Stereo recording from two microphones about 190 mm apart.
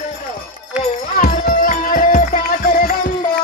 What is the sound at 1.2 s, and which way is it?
Music, 45° left (ahead or behind).